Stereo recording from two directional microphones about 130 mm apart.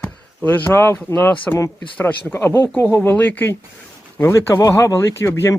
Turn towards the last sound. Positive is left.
turn(degrees=20)  # may be behind; listen again after turning